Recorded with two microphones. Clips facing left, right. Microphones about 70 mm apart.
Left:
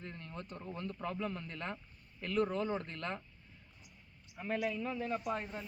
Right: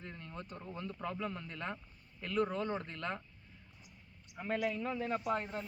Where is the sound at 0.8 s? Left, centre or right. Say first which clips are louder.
Even; centre.